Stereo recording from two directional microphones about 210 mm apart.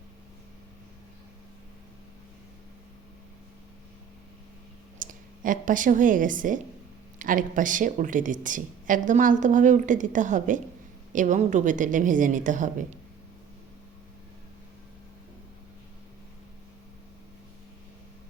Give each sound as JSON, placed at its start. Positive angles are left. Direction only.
{"t": 4.9, "sound": "a woman's voice", "side_deg": -40}